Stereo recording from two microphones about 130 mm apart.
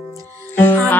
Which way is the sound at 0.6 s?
15° left (ahead or behind).